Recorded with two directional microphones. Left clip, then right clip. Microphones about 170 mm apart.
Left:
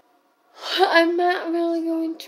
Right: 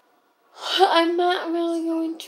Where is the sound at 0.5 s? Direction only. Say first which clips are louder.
Left 1 dB; 20° left (ahead or behind).